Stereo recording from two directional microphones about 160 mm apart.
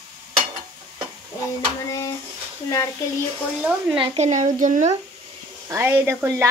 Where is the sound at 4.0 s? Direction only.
45° right (ahead or behind).